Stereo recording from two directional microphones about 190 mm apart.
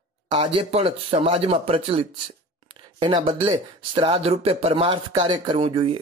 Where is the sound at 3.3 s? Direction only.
30° right (ahead or behind).